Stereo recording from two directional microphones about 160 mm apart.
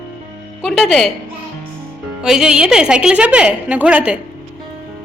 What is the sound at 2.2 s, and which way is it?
A woman's voice, 5° right (ahead or behind).